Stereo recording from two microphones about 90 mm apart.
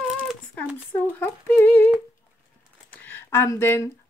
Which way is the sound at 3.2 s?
30° left (ahead or behind).